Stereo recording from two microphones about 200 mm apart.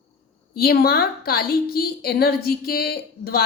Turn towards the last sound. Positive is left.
turn(degrees=50)  # may be behind; listen again after turning